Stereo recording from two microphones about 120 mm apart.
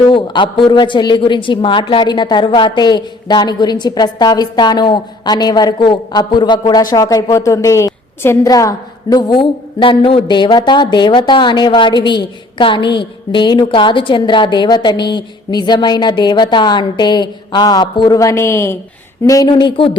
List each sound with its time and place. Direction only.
0.1 s a man's voice: 45° left (ahead or behind)